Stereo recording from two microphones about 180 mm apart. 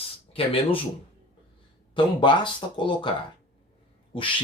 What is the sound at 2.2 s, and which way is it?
Speech, 25° left (ahead or behind).